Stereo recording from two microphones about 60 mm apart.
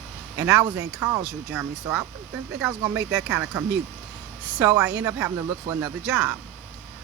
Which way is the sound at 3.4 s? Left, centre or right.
Right.